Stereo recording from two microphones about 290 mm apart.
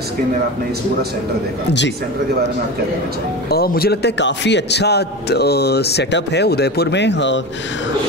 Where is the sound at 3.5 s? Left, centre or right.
Left.